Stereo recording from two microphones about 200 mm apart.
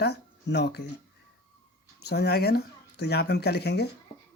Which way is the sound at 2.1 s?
50° left (ahead or behind).